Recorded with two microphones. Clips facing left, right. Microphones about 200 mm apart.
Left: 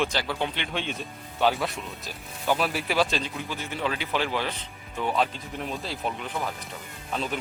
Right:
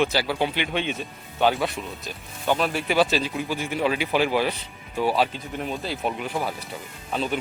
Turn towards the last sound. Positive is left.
turn(degrees=0)  # may be behind; listen again after turning